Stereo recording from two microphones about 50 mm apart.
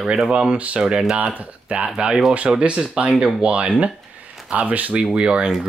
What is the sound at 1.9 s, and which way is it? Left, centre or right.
Speech, centre.